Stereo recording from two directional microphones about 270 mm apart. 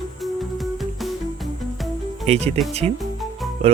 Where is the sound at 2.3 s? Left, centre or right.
Right.